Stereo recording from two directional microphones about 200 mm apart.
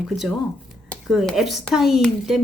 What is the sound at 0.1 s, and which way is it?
Speech, centre (ahead or behind).